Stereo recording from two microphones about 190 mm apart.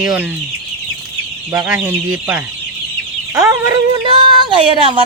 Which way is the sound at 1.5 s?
5° right (ahead or behind).